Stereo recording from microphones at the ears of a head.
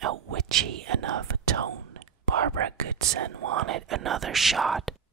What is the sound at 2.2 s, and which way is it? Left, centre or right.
Speech, right.